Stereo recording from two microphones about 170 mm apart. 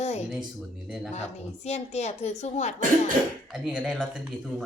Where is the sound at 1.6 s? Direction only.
40° left (ahead or behind).